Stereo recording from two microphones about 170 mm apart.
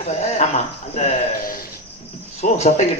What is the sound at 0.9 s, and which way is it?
A man's voice, 40° left (ahead or behind).